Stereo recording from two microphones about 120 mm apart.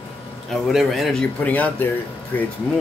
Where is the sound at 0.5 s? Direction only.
Centre (ahead or behind).